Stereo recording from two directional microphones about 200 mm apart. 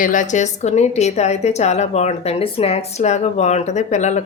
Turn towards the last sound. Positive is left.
turn(degrees=35)  # may be behind; listen again after turning